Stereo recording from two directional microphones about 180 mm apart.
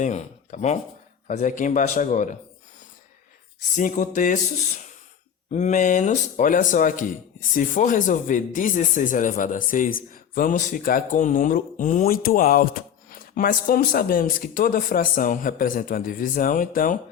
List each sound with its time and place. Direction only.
0.0 s speech: 40° left (ahead or behind)
3.8 s speech: 45° left (ahead or behind)
5.5 s speech: 40° left (ahead or behind)